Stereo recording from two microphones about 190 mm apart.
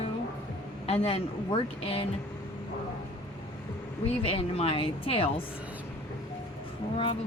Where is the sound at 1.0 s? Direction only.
30° left (ahead or behind).